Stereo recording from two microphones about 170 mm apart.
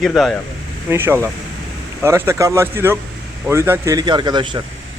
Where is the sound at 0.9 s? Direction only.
15° right (ahead or behind).